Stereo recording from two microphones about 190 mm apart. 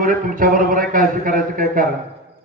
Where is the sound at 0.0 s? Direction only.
45° right (ahead or behind).